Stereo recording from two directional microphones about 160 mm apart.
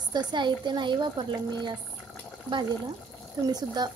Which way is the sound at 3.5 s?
25° right (ahead or behind).